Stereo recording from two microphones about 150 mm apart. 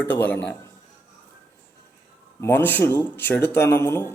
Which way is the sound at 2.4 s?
15° left (ahead or behind).